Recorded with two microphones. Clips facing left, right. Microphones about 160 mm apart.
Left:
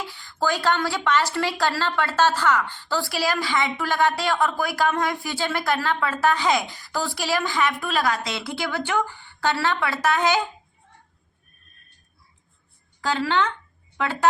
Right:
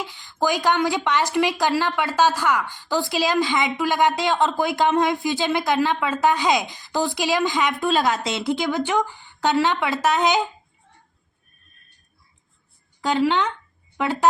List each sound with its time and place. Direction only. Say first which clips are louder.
0.1 s a woman's voice: right 2 dB; 20° right (ahead or behind)
13.0 s speech: right 3 dB; 15° right (ahead or behind)